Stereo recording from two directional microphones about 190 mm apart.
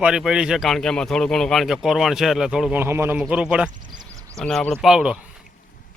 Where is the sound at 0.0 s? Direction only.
5° right (ahead or behind).